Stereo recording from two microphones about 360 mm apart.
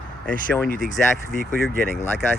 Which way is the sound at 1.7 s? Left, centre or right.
Right.